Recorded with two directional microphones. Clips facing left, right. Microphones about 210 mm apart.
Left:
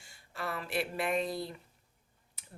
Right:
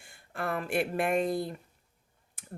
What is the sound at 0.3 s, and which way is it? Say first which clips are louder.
Speech: right 5 dB; 50° right (ahead or behind).